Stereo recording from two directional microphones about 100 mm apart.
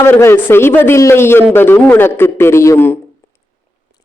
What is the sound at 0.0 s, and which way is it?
A woman's voice, 25° left (ahead or behind).